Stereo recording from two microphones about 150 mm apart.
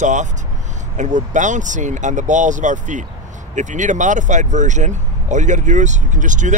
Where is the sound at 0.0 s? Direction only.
55° right (ahead or behind).